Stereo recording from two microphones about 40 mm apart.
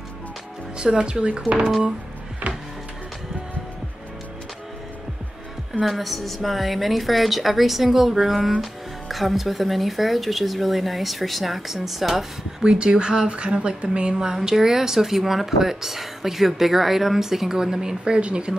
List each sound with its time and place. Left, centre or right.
0.7 s speech: right
5.9 s speech: centre
12.6 s speech: right